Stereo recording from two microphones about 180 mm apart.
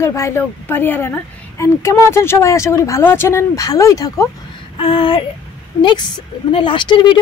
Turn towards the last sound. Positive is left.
turn(degrees=25)  # may be behind; listen again after turning